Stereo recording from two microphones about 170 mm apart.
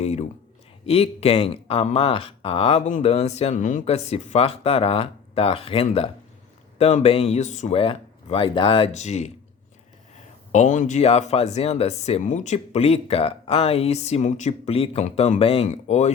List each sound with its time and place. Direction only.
0.0 s speech: 40° left (ahead or behind)
10.5 s speech: 45° left (ahead or behind)